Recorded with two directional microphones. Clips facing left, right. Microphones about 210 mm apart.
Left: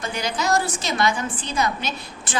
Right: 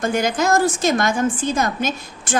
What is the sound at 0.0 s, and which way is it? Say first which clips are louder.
A woman's voice: right 7 dB; 50° right (ahead or behind).